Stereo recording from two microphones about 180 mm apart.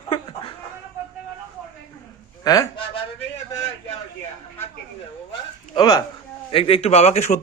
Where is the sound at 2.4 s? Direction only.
20° left (ahead or behind).